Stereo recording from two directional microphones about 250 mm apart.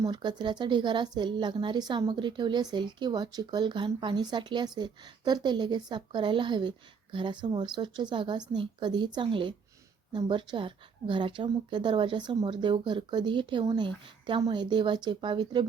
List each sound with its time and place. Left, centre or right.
0.0 s speech: centre